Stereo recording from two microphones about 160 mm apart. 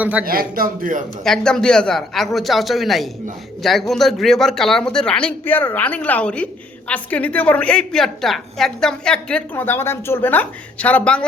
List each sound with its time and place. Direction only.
0.0 s a man's voice: 10° right (ahead or behind)
0.3 s speech: 65° right (ahead or behind)
1.2 s a man's voice: 5° left (ahead or behind)